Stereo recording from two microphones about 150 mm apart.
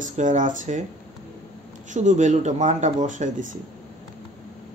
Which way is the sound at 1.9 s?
55° right (ahead or behind).